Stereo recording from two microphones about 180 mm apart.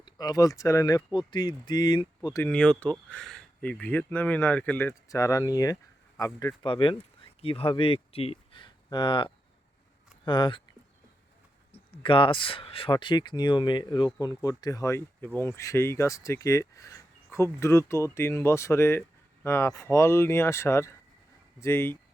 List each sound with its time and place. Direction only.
0.0 s speech: 20° left (ahead or behind)
2.4 s speech: 5° left (ahead or behind); by 10.6 s 25° left (ahead or behind)
11.9 s speech: 30° left (ahead or behind); by 21.9 s 15° left (ahead or behind)